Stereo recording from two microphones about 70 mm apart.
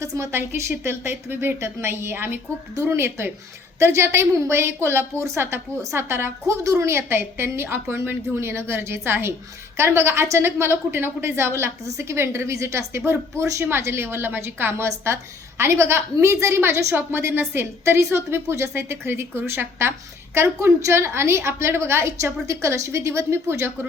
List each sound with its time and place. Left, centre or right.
0.0 s a woman's voice: right